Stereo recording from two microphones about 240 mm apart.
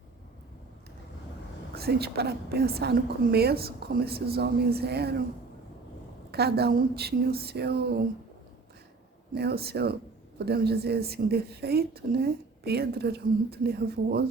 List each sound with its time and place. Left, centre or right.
1.7 s speech: right
6.3 s speech: right
9.3 s speech: right